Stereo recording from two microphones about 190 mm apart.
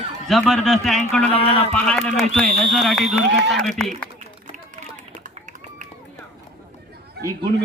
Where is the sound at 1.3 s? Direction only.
30° left (ahead or behind).